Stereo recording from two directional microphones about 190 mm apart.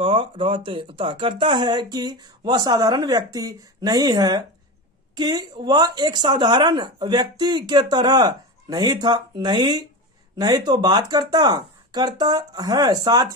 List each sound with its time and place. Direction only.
0.0 s speech: 25° right (ahead or behind)